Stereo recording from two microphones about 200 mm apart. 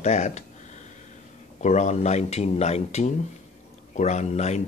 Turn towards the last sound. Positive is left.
turn(degrees=35)  # may be behind; listen again after turning